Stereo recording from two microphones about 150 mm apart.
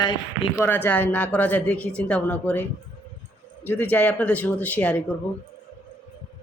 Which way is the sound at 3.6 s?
10° left (ahead or behind).